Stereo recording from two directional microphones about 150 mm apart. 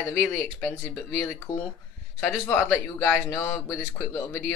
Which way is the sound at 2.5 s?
15° left (ahead or behind).